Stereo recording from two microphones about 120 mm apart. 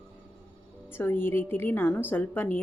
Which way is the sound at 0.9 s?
20° left (ahead or behind).